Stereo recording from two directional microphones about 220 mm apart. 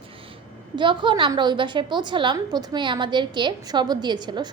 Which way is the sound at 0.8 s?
20° right (ahead or behind).